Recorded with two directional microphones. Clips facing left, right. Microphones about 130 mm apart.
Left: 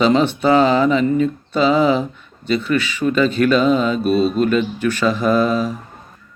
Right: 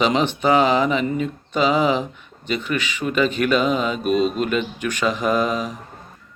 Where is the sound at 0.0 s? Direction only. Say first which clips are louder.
Left 4 dB; 15° right (ahead or behind).